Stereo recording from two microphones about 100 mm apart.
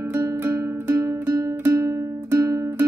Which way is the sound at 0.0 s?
25° right (ahead or behind).